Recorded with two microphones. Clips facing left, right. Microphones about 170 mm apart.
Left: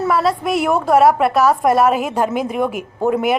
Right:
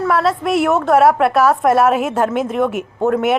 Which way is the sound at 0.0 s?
5° left (ahead or behind).